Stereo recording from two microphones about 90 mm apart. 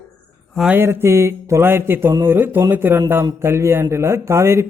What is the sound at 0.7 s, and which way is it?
Speech, 25° right (ahead or behind).